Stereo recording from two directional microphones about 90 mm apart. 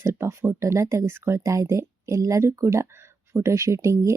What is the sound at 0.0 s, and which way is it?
Speech, 30° right (ahead or behind).